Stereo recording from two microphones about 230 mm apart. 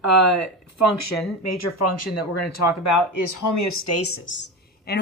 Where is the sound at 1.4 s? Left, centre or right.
Left.